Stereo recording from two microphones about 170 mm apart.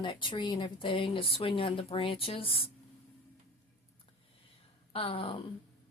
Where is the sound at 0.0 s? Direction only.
30° left (ahead or behind).